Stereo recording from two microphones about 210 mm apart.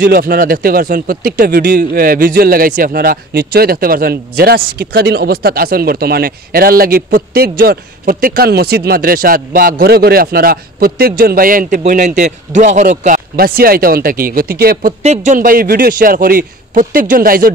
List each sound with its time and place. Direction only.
0.0 s speech: 45° right (ahead or behind)